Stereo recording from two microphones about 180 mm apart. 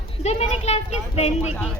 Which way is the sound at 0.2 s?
35° left (ahead or behind).